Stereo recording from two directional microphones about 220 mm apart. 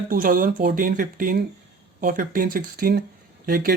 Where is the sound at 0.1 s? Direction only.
40° right (ahead or behind).